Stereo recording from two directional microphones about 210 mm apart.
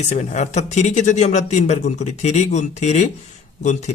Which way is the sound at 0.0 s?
35° left (ahead or behind).